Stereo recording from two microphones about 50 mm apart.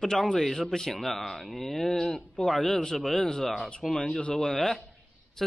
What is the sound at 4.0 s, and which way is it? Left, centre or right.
Speech, left.